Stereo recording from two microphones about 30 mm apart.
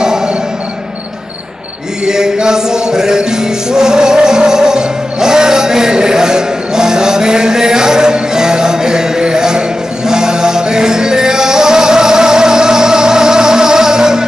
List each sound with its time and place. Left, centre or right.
2.0 s music: right